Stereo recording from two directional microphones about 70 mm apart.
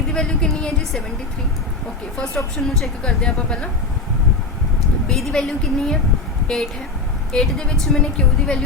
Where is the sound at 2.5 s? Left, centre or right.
Centre.